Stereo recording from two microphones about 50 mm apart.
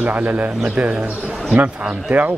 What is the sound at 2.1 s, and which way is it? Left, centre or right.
Speech, right.